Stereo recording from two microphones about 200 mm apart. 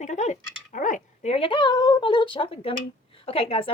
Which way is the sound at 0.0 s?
35° left (ahead or behind).